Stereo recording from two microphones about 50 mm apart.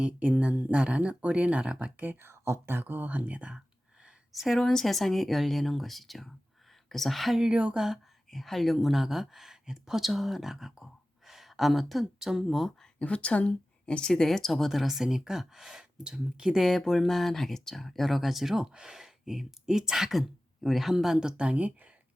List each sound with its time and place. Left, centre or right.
0.0 s speech: right
2.0 s speech: right
2.3 s speech: right
2.8 s speech: right
4.4 s speech: centre
7.3 s speech: centre
8.3 s speech: centre
13.0 s speech: left; by 21.7 s right